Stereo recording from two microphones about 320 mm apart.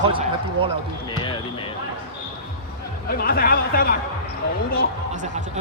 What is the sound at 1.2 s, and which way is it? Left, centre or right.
Basketball bounce, centre.